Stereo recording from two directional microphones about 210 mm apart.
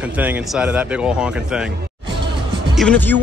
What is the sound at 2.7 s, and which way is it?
Speech, 5° left (ahead or behind).